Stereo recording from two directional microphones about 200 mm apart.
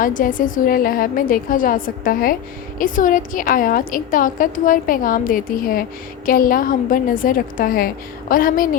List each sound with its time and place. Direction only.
0.0 s a woman's voice: 40° left (ahead or behind)